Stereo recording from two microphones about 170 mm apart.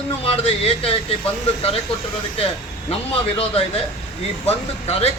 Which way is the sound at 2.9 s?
35° left (ahead or behind).